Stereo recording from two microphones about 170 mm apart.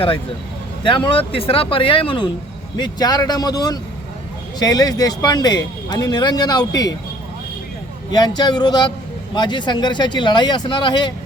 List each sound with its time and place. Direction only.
0.9 s speech: 30° left (ahead or behind)
8.1 s speech: 25° left (ahead or behind)